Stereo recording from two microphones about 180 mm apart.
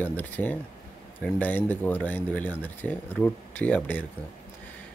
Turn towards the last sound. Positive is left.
turn(degrees=10)  # may be behind; listen again after turning